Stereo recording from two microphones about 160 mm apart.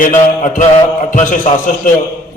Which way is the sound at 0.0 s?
55° left (ahead or behind).